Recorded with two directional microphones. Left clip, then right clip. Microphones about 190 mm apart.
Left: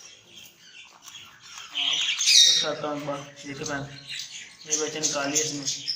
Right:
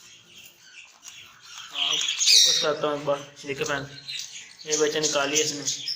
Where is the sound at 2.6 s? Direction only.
30° right (ahead or behind).